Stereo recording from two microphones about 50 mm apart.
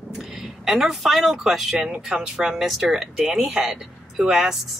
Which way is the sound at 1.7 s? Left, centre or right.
Centre.